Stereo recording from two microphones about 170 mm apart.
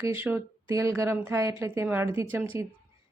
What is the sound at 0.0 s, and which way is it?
Speech, 10° right (ahead or behind).